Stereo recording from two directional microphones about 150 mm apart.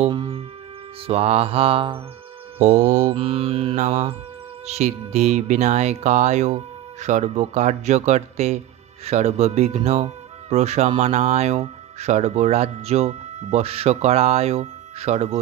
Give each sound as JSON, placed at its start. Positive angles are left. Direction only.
{"t": 0.1, "sound": "music", "side_deg": -35}
{"t": 1.0, "sound": "mantra", "side_deg": -40}
{"t": 2.6, "sound": "speech", "side_deg": -45}
{"t": 3.1, "sound": "mantra", "side_deg": -40}
{"t": 4.6, "sound": "speech", "side_deg": -50}